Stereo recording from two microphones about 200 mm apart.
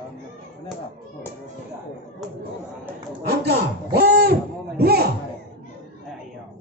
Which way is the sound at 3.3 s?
50° right (ahead or behind).